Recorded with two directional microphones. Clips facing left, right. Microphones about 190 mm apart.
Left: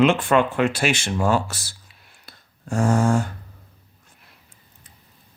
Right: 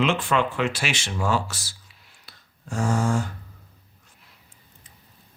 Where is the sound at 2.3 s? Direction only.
55° left (ahead or behind).